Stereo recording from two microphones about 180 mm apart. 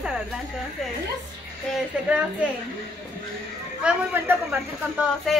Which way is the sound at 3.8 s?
10° right (ahead or behind).